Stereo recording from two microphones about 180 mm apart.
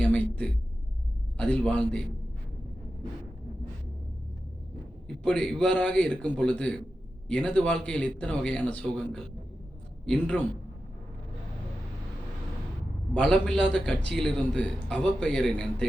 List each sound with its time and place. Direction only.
0.0 s a sound: 5° left (ahead or behind)
1.4 s a man's voice: 5° left (ahead or behind)
5.0 s a man's voice: 5° left (ahead or behind)
13.1 s a man's voice: 5° left (ahead or behind)